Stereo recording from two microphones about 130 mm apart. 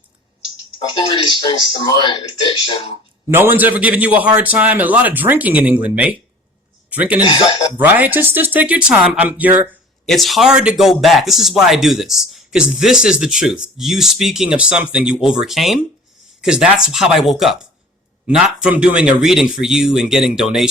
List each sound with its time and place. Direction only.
0.9 s speech: 35° left (ahead or behind)
3.2 s speech: 15° right (ahead or behind)
7.2 s speech: 35° left (ahead or behind)
7.8 s speech: 15° right (ahead or behind)
10.1 s speech: centre (ahead or behind)